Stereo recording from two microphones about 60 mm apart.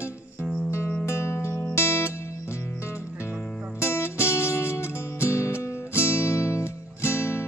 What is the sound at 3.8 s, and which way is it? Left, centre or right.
Music, left.